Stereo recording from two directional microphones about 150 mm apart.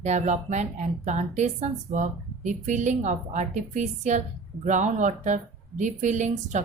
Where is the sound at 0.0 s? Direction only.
50° right (ahead or behind).